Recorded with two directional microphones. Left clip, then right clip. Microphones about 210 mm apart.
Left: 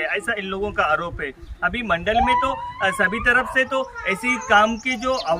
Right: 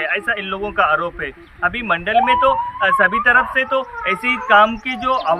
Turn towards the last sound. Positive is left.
turn(degrees=20)  # may be behind; listen again after turning